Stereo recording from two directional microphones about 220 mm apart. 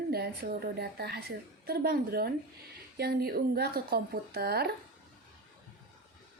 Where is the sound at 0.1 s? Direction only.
45° right (ahead or behind).